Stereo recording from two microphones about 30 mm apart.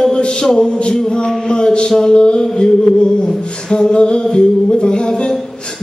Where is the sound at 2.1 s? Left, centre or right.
Left.